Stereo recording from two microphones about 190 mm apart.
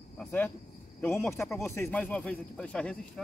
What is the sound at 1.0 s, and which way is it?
Speech, centre (ahead or behind).